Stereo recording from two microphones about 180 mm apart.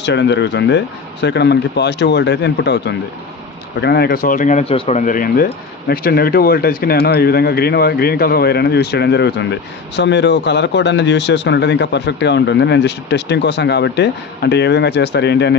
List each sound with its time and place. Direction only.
0.0 s speech: 75° left (ahead or behind)